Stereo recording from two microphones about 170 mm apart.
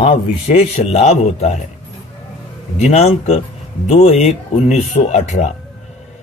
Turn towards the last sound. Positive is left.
turn(degrees=40)  # may be behind; listen again after turning